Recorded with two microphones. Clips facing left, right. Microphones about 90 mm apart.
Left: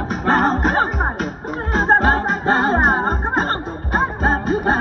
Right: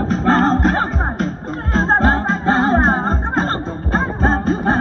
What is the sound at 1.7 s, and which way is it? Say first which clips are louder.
Music: even; 15° left (ahead or behind).